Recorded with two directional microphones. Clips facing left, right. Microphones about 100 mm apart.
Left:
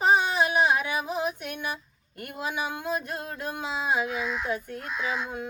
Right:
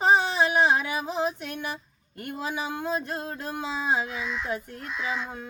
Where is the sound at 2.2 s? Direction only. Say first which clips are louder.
Even; 30° right (ahead or behind).